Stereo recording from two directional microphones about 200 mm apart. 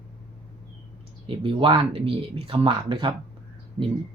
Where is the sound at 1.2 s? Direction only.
25° right (ahead or behind).